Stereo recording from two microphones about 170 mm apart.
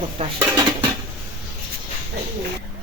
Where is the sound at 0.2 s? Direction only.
35° right (ahead or behind).